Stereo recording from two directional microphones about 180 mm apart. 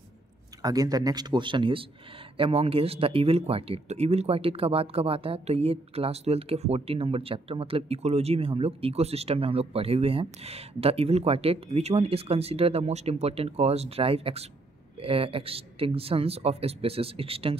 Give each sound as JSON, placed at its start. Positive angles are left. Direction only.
{"t": 0.6, "sound": "speech", "side_deg": -20}